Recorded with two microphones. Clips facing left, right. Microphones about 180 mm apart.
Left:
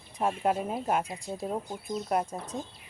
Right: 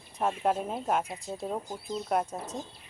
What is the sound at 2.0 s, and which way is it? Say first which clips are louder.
Speech: right 1 dB; centre (ahead or behind).